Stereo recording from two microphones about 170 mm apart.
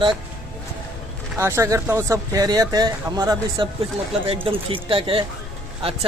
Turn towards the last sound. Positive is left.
turn(degrees=-35)  # may be behind; listen again after turning